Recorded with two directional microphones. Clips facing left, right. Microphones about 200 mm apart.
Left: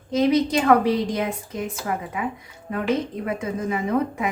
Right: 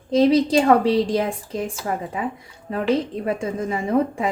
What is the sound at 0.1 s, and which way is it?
A woman's voice, 30° right (ahead or behind).